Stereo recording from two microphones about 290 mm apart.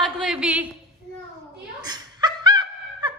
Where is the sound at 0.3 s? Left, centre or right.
Centre.